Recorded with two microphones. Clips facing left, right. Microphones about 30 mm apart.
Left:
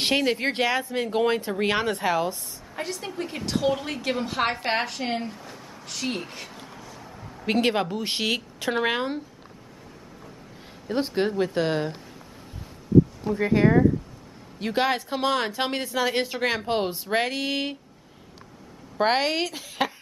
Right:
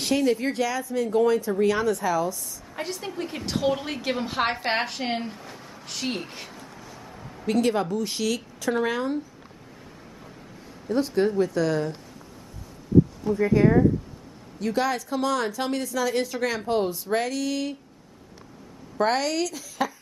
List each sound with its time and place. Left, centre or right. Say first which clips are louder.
0.0 s speech: even; left
2.7 s a woman's voice: even; centre
7.4 s a woman's voice: even; left
10.9 s a woman's voice: right 2 dB; left
13.4 s speech: even; left
14.6 s a woman's voice: left 1 dB; left
18.9 s a woman's voice: left 1 dB; left